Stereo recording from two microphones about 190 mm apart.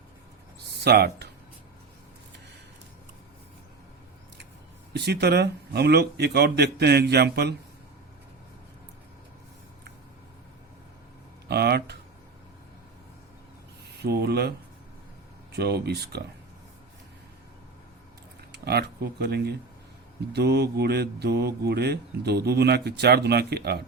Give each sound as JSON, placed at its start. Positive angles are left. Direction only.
{"t": 0.7, "sound": "a sound", "side_deg": -60}
{"t": 4.9, "sound": "speech", "side_deg": -60}
{"t": 11.4, "sound": "speech", "side_deg": -60}
{"t": 14.0, "sound": "speech", "side_deg": -60}
{"t": 15.5, "sound": "speech", "side_deg": -55}
{"t": 18.5, "sound": "speech", "side_deg": -60}